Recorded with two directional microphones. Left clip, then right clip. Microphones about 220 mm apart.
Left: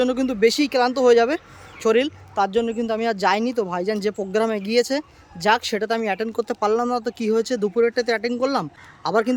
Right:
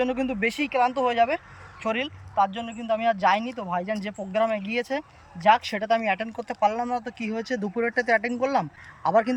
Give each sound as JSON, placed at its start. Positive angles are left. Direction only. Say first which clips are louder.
{"t": 0.0, "sound": "speech", "louder": "left 6 dB", "side_deg": 15}